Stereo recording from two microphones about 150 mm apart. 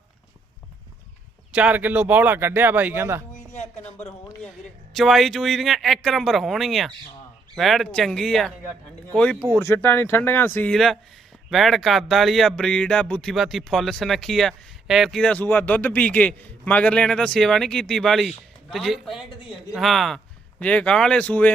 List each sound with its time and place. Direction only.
1.5 s speech: 10° right (ahead or behind)
3.3 s a sound: 50° left (ahead or behind)
4.9 s speech: centre (ahead or behind)